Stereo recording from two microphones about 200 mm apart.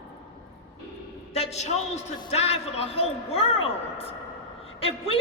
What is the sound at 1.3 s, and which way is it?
A man's voice, 35° left (ahead or behind).